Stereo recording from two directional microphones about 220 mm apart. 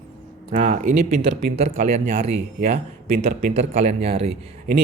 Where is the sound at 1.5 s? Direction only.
30° right (ahead or behind).